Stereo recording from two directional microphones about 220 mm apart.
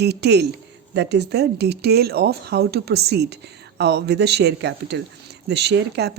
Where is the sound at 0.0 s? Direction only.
50° right (ahead or behind).